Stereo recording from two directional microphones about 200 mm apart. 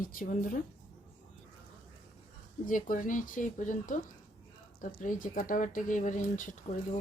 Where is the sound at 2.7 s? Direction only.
40° left (ahead or behind).